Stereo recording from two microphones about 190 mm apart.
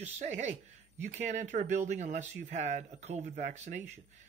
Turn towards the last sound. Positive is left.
turn(degrees=-40)  # may be behind; listen again after turning